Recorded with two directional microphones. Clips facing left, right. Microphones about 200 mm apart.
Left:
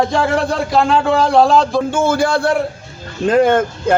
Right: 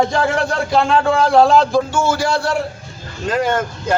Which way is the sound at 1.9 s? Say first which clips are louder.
Left 3 dB; 55° left (ahead or behind).